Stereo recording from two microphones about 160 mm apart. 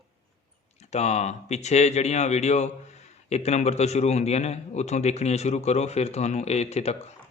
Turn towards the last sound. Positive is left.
turn(degrees=40)  # may be behind; listen again after turning